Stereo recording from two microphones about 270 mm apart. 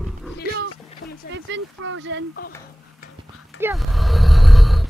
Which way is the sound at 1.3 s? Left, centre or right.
Right.